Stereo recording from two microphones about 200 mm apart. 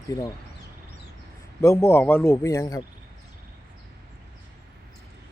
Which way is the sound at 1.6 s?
15° left (ahead or behind).